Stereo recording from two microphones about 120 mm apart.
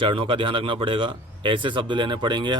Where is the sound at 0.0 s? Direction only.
45° right (ahead or behind).